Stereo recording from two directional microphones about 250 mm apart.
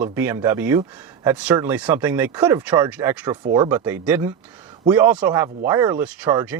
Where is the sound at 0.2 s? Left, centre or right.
Centre.